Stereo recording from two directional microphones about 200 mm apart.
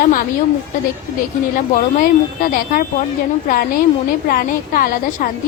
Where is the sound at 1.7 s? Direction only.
45° left (ahead or behind).